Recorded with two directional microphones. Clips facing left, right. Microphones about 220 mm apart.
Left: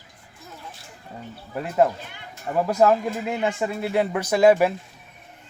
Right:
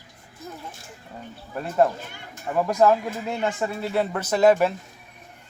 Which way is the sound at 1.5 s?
10° left (ahead or behind).